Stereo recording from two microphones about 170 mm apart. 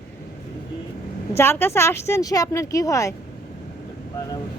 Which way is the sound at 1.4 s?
10° left (ahead or behind).